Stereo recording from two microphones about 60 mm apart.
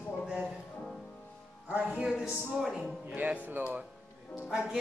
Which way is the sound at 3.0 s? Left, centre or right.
Right.